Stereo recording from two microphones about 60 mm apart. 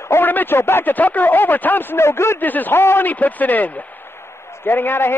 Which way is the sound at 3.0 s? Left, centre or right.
Left.